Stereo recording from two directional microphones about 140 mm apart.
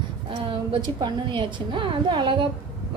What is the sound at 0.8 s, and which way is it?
A woman's voice, 30° right (ahead or behind).